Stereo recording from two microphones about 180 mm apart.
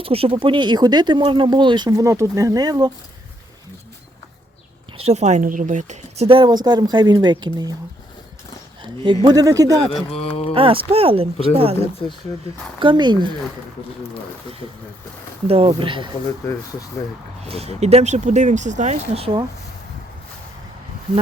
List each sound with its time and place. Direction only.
0.0 s speech: 30° right (ahead or behind)
4.9 s speech: 35° right (ahead or behind); by 7.8 s 20° right (ahead or behind)
9.2 s speech: 20° right (ahead or behind)
9.9 s speech: 30° left (ahead or behind)
10.5 s speech: 30° right (ahead or behind)
12.0 s speech: 30° left (ahead or behind)
12.8 s speech: 25° right (ahead or behind)
15.4 s speech: 30° right (ahead or behind)
17.4 s speech: 35° right (ahead or behind)